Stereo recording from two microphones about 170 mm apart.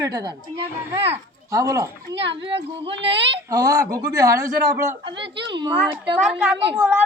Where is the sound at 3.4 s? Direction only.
20° right (ahead or behind).